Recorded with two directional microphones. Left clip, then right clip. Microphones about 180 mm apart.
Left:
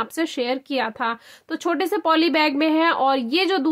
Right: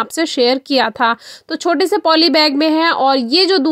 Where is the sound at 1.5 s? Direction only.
30° right (ahead or behind).